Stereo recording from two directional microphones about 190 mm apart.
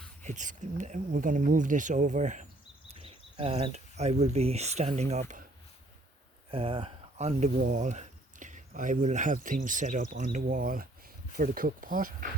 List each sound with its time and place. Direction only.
0.2 s speech: 40° right (ahead or behind)
6.5 s speech: 30° right (ahead or behind); by 12.3 s 45° right (ahead or behind)